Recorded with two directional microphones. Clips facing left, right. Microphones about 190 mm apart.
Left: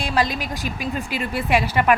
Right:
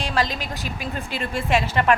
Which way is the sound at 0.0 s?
15° left (ahead or behind).